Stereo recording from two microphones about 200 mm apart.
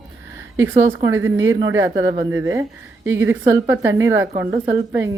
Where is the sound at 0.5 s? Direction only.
15° right (ahead or behind).